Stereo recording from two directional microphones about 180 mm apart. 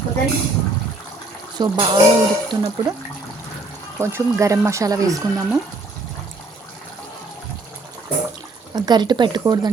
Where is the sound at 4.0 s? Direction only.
15° right (ahead or behind).